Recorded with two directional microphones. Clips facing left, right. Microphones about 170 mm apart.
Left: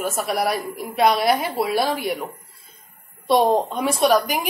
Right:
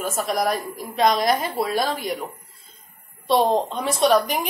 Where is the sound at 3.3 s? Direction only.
10° left (ahead or behind).